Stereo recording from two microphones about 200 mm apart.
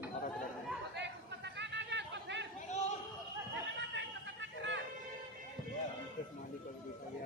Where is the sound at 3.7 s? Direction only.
65° right (ahead or behind).